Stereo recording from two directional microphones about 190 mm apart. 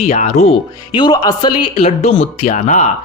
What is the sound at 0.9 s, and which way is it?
Speech, 20° left (ahead or behind).